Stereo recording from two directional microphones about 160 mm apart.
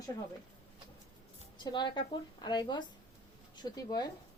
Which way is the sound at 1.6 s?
30° left (ahead or behind).